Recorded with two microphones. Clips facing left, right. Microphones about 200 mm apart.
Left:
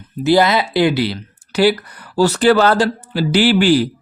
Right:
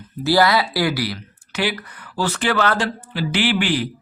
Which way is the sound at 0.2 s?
20° left (ahead or behind).